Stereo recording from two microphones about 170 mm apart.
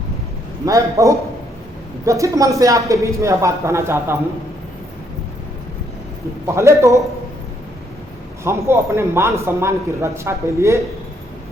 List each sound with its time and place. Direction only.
0.6 s speech: 20° right (ahead or behind)
6.5 s a man's voice: 15° right (ahead or behind)
8.4 s a man's voice: 15° right (ahead or behind)